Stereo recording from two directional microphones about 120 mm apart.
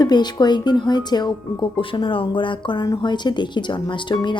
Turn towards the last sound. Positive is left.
turn(degrees=40)  # may be behind; listen again after turning